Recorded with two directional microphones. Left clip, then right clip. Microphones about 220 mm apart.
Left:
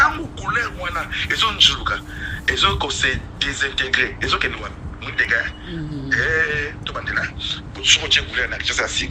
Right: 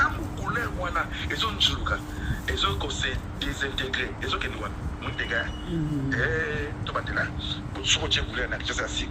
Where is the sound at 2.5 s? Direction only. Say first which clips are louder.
Left 9 dB; 35° left (ahead or behind).